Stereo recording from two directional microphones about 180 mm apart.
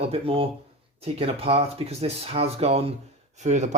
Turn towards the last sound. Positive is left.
turn(degrees=-40)  # may be behind; listen again after turning